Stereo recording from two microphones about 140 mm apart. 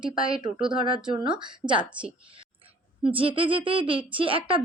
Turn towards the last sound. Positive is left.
turn(degrees=-40)  # may be behind; listen again after turning